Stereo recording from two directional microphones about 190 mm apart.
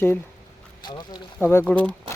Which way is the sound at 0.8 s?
20° left (ahead or behind).